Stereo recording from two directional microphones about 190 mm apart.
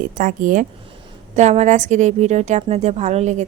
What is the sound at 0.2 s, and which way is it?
A woman's voice, 45° right (ahead or behind).